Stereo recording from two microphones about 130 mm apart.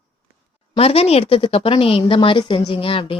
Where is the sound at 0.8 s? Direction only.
50° left (ahead or behind).